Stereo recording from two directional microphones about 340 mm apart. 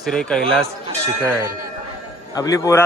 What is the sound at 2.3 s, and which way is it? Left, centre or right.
Speech, centre.